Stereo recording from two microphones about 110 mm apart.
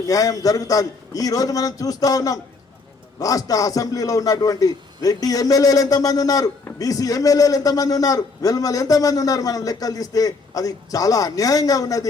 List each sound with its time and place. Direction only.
0.1 s a man's voice: 30° left (ahead or behind)